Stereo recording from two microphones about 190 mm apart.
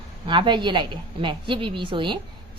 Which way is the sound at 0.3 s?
25° right (ahead or behind).